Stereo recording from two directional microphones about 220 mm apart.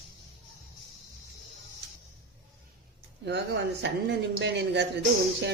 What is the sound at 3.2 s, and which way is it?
A woman's voice, 50° right (ahead or behind).